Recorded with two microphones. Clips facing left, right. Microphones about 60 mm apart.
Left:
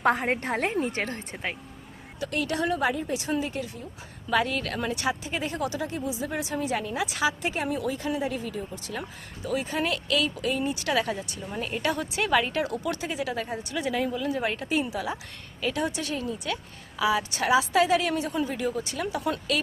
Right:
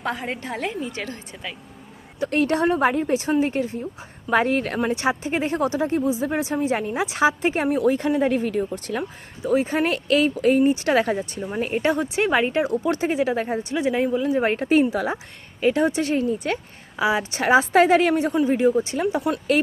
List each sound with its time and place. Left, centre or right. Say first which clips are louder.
0.0 s a woman's voice: left 4 dB; left
2.1 s speech: right 8 dB; right
8.2 s speech: right 9 dB; right
9.0 s speech: right 7 dB; right